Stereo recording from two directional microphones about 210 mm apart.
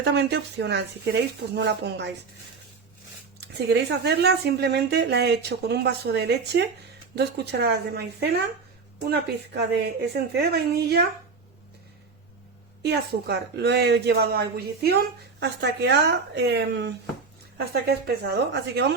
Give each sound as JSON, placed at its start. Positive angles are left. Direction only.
{"t": 0.0, "sound": "speech", "side_deg": -55}
{"t": 3.4, "sound": "speech", "side_deg": -50}
{"t": 12.8, "sound": "speech", "side_deg": -50}